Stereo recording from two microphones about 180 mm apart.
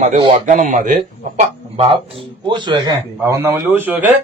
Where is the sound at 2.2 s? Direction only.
25° right (ahead or behind); by 4.1 s 10° right (ahead or behind).